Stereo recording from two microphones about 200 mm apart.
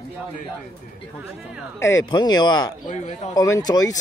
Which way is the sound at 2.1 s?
20° left (ahead or behind).